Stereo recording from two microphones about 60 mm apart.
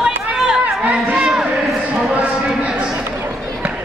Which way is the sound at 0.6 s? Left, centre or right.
Right.